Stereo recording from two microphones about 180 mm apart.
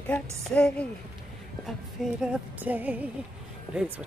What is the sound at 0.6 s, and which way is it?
Speech, 5° left (ahead or behind).